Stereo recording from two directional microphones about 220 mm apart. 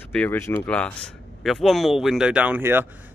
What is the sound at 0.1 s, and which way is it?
Speech, 10° left (ahead or behind).